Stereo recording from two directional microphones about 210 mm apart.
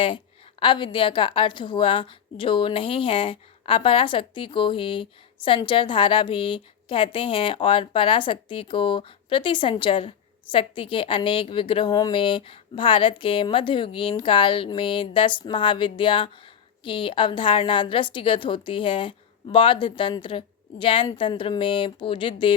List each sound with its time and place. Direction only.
0.6 s a woman's voice: 25° left (ahead or behind)